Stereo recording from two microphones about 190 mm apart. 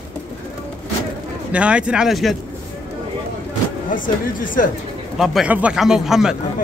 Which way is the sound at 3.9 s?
45° left (ahead or behind).